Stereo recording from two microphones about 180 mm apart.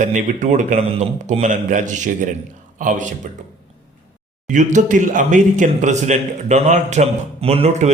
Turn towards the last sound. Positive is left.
turn(degrees=-35)  # may be behind; listen again after turning